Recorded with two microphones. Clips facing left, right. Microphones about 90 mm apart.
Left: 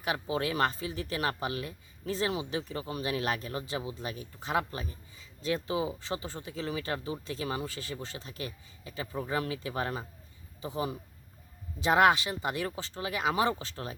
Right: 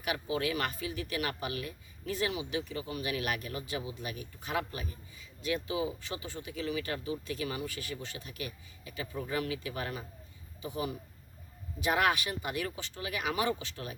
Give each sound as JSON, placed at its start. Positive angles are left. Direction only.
{"t": 0.0, "sound": "speech", "side_deg": 30}